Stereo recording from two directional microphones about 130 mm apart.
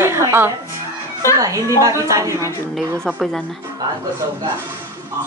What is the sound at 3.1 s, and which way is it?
Speech, 5° left (ahead or behind).